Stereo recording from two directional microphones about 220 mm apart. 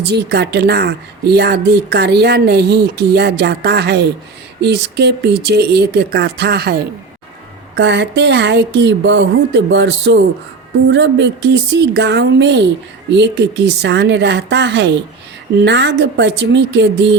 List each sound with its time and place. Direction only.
0.1 s speech: 50° right (ahead or behind)